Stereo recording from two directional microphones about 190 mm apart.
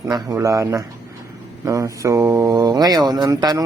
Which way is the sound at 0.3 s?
15° right (ahead or behind).